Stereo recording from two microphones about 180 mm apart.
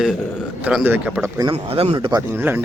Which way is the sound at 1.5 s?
30° right (ahead or behind).